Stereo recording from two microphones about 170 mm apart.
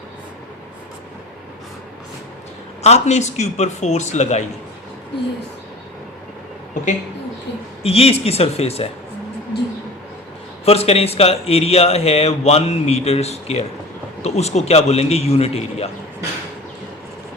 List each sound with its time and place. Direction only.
2.8 s speech: 40° left (ahead or behind)
7.8 s speech: 35° left (ahead or behind)
9.5 s speech: 75° left (ahead or behind)
10.7 s speech: 35° left (ahead or behind)